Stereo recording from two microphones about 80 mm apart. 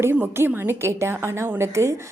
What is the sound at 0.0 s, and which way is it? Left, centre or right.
A woman's voice, right.